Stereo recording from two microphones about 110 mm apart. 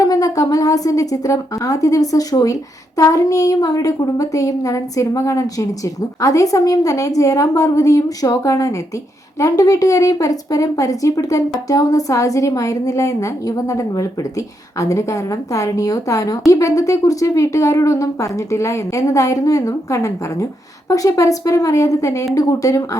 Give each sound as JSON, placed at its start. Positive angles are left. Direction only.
{"t": 0.0, "sound": "a woman's voice", "side_deg": 30}